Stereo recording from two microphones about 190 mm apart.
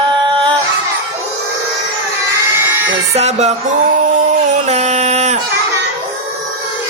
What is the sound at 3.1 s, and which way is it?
Music, 35° right (ahead or behind).